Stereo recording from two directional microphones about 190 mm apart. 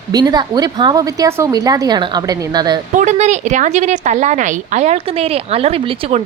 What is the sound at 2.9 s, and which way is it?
A woman's voice, 40° right (ahead or behind).